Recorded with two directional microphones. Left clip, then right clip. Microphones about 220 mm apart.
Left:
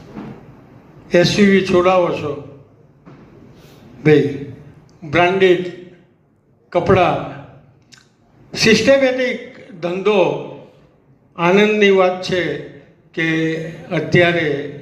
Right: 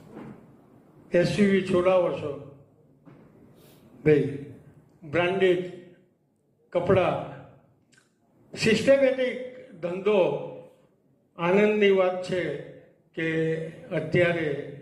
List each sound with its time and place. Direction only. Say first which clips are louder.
1.0 s a man's voice: left 10 dB; 40° left (ahead or behind)
5.1 s a man's voice: left 10 dB; 40° left (ahead or behind)
6.7 s a man's voice: left 9 dB; 45° left (ahead or behind)
8.5 s a man's voice: left 9 dB; 40° left (ahead or behind)
11.3 s a man's voice: left 9 dB; 40° left (ahead or behind)